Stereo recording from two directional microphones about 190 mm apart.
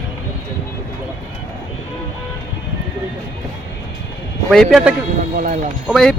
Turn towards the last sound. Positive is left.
turn(degrees=0)  # may be behind; listen again after turning